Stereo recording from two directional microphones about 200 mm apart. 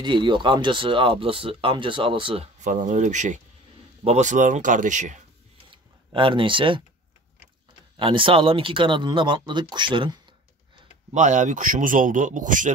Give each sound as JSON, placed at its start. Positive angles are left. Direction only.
{"t": 0.0, "sound": "speech", "side_deg": -25}
{"t": 6.1, "sound": "speech", "side_deg": -25}
{"t": 8.0, "sound": "speech", "side_deg": -25}
{"t": 11.1, "sound": "speech", "side_deg": -40}